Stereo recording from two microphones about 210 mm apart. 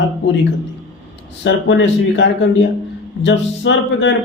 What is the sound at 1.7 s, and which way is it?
Speech, 60° left (ahead or behind).